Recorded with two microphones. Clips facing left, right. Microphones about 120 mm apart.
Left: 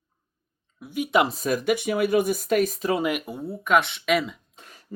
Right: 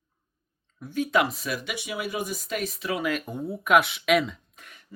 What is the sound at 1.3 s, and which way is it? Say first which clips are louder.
Speech: left 9 dB; 40° left (ahead or behind).